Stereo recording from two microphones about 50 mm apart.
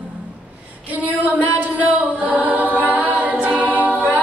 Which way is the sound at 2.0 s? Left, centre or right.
Right.